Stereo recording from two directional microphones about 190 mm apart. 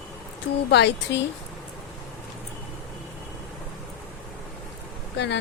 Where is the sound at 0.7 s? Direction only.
65° left (ahead or behind).